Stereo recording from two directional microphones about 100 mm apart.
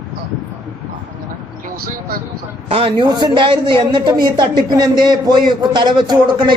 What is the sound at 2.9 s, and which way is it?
A woman's voice, 45° right (ahead or behind).